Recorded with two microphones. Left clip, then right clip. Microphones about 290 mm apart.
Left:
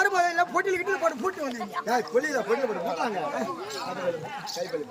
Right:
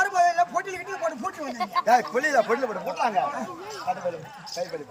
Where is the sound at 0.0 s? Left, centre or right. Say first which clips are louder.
Right 2 dB; centre.